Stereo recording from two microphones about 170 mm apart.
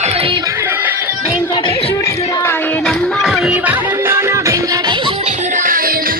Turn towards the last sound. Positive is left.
turn(degrees=-60)  # may be behind; listen again after turning